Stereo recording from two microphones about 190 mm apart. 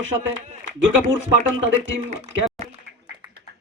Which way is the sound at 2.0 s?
40° right (ahead or behind).